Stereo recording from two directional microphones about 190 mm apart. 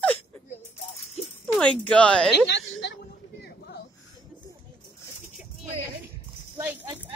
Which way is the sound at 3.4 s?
60° left (ahead or behind).